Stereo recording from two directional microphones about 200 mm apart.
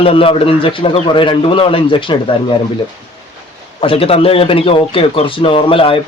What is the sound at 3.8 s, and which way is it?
A man's voice, 30° left (ahead or behind).